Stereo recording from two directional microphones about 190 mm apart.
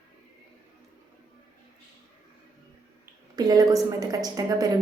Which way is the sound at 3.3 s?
20° right (ahead or behind).